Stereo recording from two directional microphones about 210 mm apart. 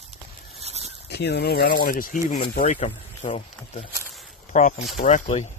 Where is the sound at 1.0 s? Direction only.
50° left (ahead or behind).